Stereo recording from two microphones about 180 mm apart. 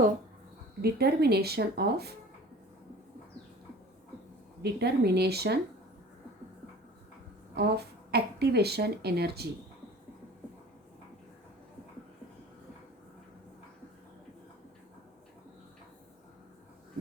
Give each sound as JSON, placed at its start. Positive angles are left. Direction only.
{"t": 0.8, "sound": "speech", "side_deg": -60}
{"t": 4.6, "sound": "speech", "side_deg": -65}
{"t": 7.5, "sound": "speech", "side_deg": -65}